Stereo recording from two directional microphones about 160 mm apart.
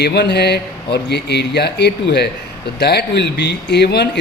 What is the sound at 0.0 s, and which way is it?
A man's voice, 90° left.